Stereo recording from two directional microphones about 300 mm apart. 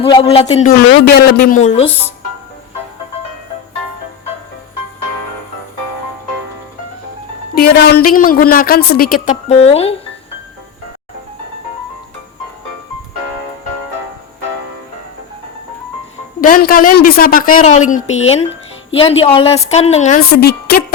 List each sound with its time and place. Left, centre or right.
0.0 s speech: centre
7.5 s speech: left
16.4 s speech: left